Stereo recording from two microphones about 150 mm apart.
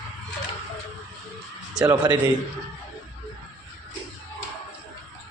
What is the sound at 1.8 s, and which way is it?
Speech, 25° right (ahead or behind).